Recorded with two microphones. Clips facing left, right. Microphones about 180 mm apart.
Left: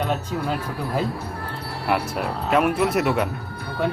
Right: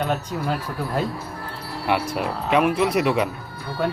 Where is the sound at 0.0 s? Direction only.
5° right (ahead or behind).